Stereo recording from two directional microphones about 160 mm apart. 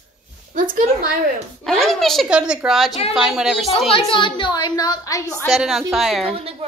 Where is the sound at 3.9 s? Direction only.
35° left (ahead or behind).